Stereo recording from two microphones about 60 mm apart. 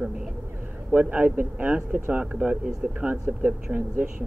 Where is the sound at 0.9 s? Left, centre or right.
Right.